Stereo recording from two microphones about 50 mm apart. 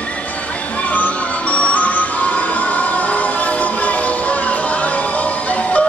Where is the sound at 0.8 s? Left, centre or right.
Left.